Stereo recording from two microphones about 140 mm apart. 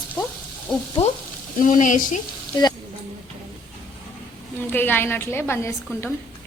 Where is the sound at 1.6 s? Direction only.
65° left (ahead or behind).